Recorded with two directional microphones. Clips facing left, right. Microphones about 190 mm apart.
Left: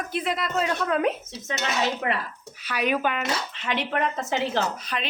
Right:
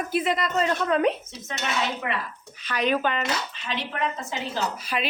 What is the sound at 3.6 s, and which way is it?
A woman's voice, 60° left (ahead or behind).